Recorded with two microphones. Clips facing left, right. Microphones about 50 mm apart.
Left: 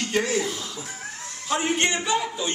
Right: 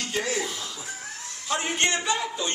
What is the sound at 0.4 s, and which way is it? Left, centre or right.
Speech, centre.